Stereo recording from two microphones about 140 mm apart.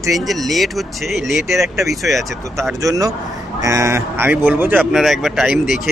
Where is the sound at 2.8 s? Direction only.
25° right (ahead or behind).